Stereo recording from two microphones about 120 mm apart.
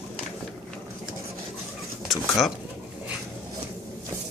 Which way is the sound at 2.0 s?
Centre (ahead or behind).